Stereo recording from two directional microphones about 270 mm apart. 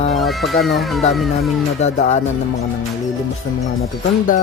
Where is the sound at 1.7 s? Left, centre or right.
Left.